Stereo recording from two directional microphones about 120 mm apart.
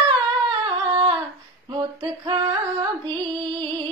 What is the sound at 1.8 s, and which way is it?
Music, 40° right (ahead or behind).